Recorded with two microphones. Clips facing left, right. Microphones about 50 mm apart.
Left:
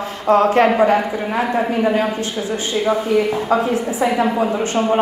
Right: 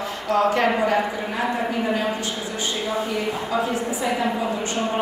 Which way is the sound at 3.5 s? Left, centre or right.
Left.